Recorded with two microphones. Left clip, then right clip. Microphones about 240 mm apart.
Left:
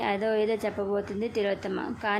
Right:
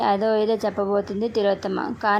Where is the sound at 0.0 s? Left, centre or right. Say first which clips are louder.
Right 6 dB; centre.